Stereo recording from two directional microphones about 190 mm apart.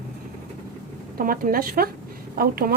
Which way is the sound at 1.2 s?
45° right (ahead or behind).